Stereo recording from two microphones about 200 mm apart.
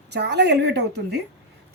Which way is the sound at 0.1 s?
60° right (ahead or behind).